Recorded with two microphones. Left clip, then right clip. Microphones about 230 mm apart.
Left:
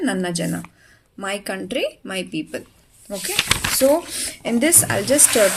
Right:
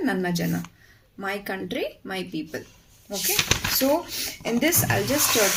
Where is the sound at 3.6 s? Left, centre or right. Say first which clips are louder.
Left 6 dB; left.